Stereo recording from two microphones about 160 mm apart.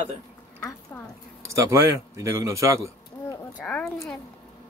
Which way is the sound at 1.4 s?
20° right (ahead or behind).